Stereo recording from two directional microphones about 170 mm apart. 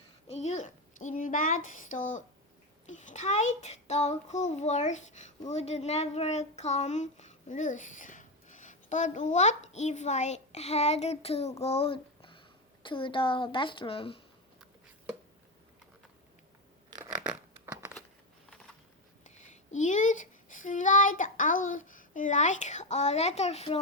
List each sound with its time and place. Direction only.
0.3 s a child's voice: 40° left (ahead or behind)
17.0 s a sound: 5° right (ahead or behind)
19.2 s a child's voice: 45° left (ahead or behind)